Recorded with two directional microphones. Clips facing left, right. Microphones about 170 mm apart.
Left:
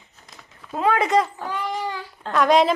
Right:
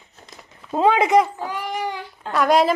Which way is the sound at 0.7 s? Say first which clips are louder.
Right 3 dB; 25° right (ahead or behind).